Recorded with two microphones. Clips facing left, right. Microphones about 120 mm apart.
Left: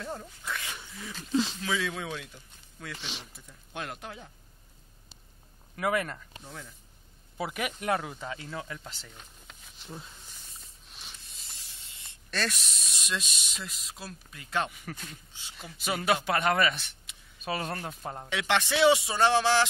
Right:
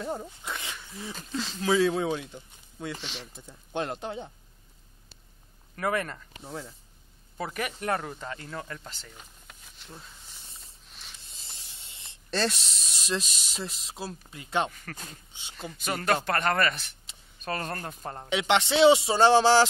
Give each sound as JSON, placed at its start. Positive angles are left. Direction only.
{"t": 0.0, "sound": "speech", "side_deg": -20}
{"t": 1.6, "sound": "a man's voice", "side_deg": -35}
{"t": 5.8, "sound": "speech", "side_deg": 5}
{"t": 6.4, "sound": "speech", "side_deg": -30}
{"t": 7.3, "sound": "speech", "side_deg": 5}
{"t": 11.2, "sound": "speech", "side_deg": -30}
{"t": 14.7, "sound": "speech", "side_deg": 10}
{"t": 15.0, "sound": "a man's voice", "side_deg": -25}
{"t": 15.7, "sound": "speech", "side_deg": 5}
{"t": 18.3, "sound": "a man's voice", "side_deg": -20}